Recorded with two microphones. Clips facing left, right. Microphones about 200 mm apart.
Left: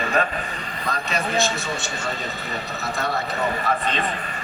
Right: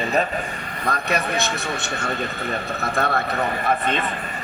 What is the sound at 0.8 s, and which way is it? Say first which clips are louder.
Speech: right 3 dB; 60° right (ahead or behind).